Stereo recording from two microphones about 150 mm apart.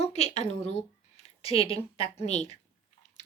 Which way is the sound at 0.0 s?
45° left (ahead or behind).